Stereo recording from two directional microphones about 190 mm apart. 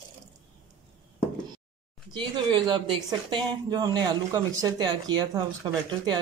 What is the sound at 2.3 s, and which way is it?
Speech, 25° right (ahead or behind).